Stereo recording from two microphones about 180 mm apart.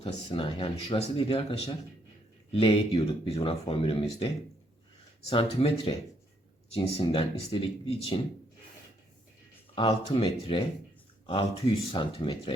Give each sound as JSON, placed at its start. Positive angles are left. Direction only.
{"t": 0.0, "sound": "a man's voice", "side_deg": 25}
{"t": 5.3, "sound": "speech", "side_deg": 30}
{"t": 9.7, "sound": "a man's voice", "side_deg": 30}